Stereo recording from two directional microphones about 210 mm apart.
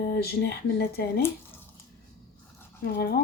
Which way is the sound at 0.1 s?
50° left (ahead or behind).